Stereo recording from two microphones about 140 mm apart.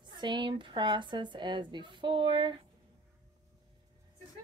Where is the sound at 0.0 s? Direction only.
35° right (ahead or behind).